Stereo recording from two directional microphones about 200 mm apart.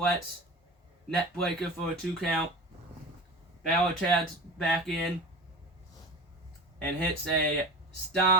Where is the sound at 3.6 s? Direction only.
Centre (ahead or behind).